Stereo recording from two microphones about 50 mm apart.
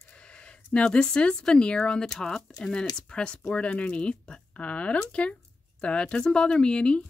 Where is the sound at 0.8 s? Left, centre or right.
Centre.